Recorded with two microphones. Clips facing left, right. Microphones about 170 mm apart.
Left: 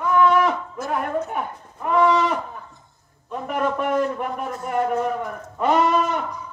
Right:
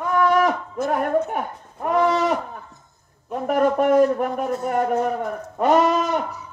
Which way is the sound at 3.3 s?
45° right (ahead or behind).